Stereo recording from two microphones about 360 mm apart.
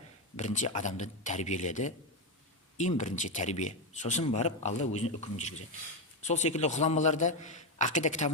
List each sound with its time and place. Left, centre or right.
0.3 s a man's voice: centre